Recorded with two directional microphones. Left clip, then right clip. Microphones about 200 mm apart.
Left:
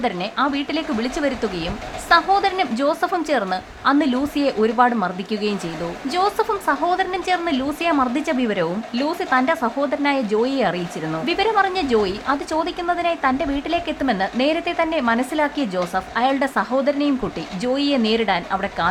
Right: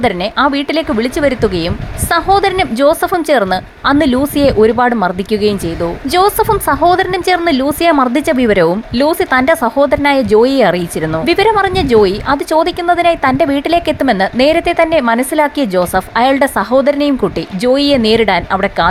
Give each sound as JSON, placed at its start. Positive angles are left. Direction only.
{"t": 0.0, "sound": "a woman's voice", "side_deg": -30}